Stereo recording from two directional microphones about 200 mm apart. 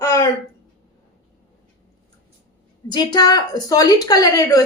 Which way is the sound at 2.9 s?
20° left (ahead or behind).